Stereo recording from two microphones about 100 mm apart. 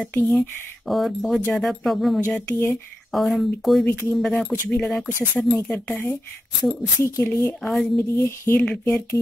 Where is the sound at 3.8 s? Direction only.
25° left (ahead or behind).